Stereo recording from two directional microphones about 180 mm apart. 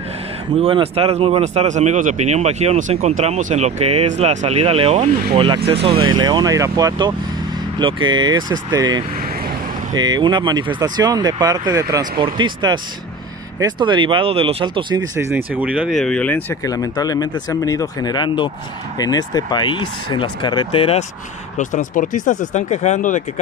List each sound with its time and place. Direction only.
0.6 s speech: 30° right (ahead or behind)
15.1 s speech: 15° right (ahead or behind); by 21.0 s 30° left (ahead or behind)
21.5 s speech: 45° left (ahead or behind)